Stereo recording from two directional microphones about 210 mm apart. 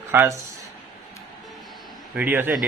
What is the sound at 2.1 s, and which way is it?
Speech, 10° right (ahead or behind).